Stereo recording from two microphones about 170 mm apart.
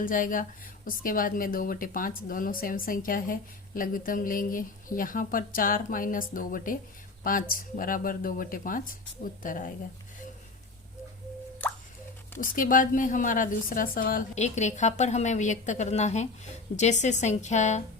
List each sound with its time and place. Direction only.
0.0 s a woman's voice: 55° left (ahead or behind)
12.4 s a woman's voice: 55° left (ahead or behind)